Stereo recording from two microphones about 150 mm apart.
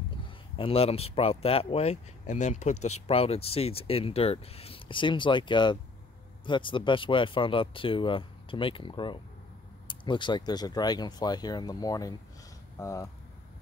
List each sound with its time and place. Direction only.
0.6 s speech: 40° left (ahead or behind); by 13.1 s 20° left (ahead or behind)